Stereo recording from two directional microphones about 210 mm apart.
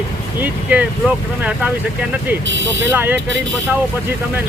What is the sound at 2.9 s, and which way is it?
Speech, 10° right (ahead or behind).